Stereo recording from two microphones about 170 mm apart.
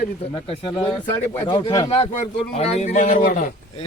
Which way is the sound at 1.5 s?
25° left (ahead or behind).